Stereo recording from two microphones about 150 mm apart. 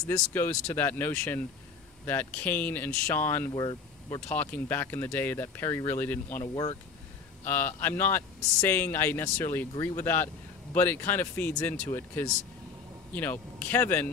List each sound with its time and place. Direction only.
0.1 s speech: 15° left (ahead or behind)
3.5 s speech: 30° left (ahead or behind)
4.3 s speech: 10° left (ahead or behind)
6.4 s speech: 30° left (ahead or behind)
7.4 s speech: 15° left (ahead or behind)
13.1 s speech: 10° left (ahead or behind)